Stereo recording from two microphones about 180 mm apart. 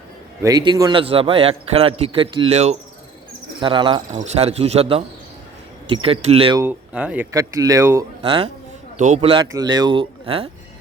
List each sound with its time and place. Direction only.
0.4 s a man's voice: 20° right (ahead or behind)
3.6 s speech: 25° right (ahead or behind)
4.1 s a man's voice: 40° right (ahead or behind)
6.6 s speech: 10° right (ahead or behind); by 8.4 s 25° right (ahead or behind)
9.0 s speech: 40° right (ahead or behind)
9.2 s speech: 30° right (ahead or behind)